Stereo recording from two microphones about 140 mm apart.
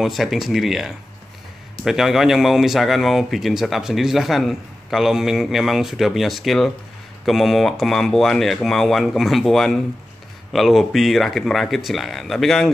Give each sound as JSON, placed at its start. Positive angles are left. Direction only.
{"t": 0.0, "sound": "speech", "side_deg": 0}